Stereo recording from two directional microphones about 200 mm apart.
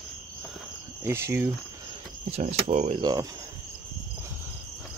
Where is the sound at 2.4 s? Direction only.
35° right (ahead or behind).